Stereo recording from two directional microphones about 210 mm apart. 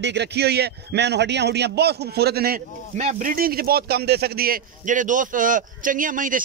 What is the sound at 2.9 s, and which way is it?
Speech, 35° right (ahead or behind).